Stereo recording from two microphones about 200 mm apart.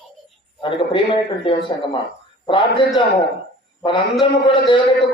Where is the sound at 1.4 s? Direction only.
25° left (ahead or behind).